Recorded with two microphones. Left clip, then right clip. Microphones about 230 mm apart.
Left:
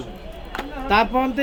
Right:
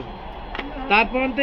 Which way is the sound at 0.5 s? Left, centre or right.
Left.